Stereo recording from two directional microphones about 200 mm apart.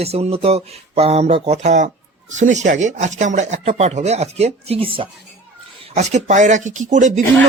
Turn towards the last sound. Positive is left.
turn(degrees=-35)  # may be behind; listen again after turning